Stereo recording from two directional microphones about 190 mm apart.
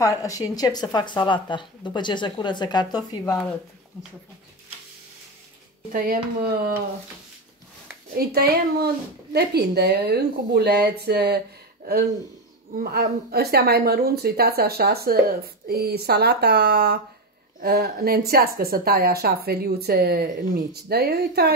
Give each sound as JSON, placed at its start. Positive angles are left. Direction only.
{"t": 0.0, "sound": "speech", "side_deg": 20}
{"t": 5.9, "sound": "speech", "side_deg": -50}
{"t": 8.2, "sound": "a woman's voice", "side_deg": -55}